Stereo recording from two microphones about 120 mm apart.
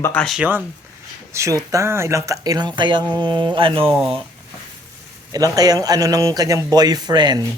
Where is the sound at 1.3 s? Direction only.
25° right (ahead or behind); by 3.9 s 45° right (ahead or behind).